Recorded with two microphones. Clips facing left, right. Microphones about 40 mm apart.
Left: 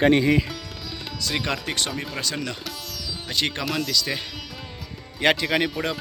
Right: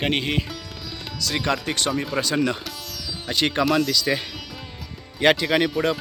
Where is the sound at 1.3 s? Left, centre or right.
Centre.